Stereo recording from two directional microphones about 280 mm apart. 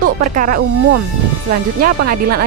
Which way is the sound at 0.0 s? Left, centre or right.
Right.